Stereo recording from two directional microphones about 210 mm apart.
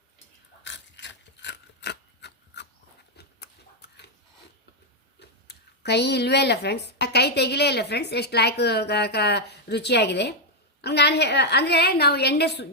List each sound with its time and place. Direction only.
0.6 s scissors: 55° left (ahead or behind)
3.2 s a sound: 50° left (ahead or behind)
5.2 s a woman's voice: 55° left (ahead or behind)